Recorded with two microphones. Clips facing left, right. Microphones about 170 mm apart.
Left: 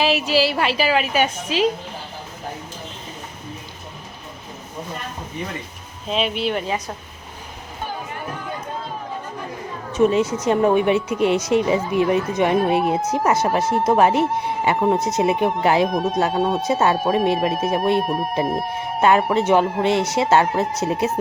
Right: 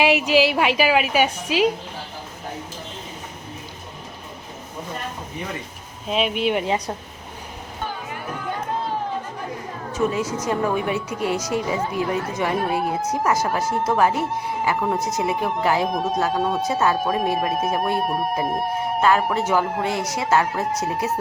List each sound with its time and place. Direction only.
0.0 s a woman's voice: 15° right (ahead or behind)
6.1 s a woman's voice: 5° right (ahead or behind)
9.9 s a woman's voice: 25° left (ahead or behind)
19.0 s a woman's voice: 20° left (ahead or behind)